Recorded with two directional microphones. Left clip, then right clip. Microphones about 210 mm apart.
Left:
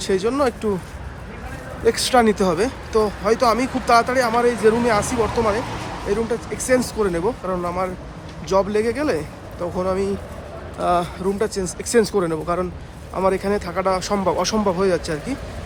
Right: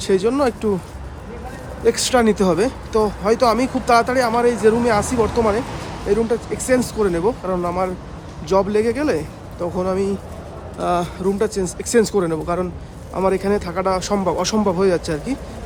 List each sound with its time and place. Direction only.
0.0 s speech: 15° right (ahead or behind)
1.8 s speech: 10° right (ahead or behind)
6.1 s speech: 20° right (ahead or behind)
11.5 s speech: 30° left (ahead or behind)
11.9 s speech: 10° right (ahead or behind)